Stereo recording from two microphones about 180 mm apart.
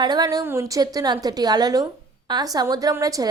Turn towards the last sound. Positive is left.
turn(degrees=-20)  # may be behind; listen again after turning